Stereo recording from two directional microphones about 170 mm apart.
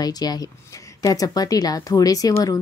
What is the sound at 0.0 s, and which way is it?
A woman's voice, 25° left (ahead or behind).